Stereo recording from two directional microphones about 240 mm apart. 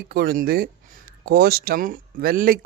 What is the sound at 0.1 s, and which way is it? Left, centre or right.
Speech, right.